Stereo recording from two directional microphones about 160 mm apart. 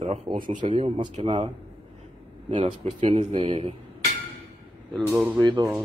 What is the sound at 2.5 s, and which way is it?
Speech, 30° right (ahead or behind).